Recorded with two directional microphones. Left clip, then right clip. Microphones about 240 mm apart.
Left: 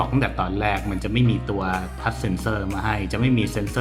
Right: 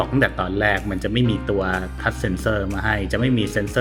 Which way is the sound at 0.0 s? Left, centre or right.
Centre.